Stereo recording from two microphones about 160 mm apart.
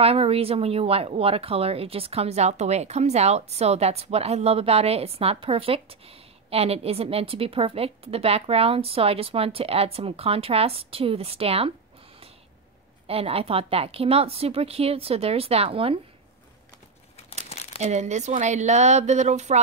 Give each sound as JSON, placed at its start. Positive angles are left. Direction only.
{"t": 0.0, "sound": "speech", "side_deg": -40}
{"t": 13.0, "sound": "speech", "side_deg": -35}
{"t": 17.7, "sound": "speech", "side_deg": -45}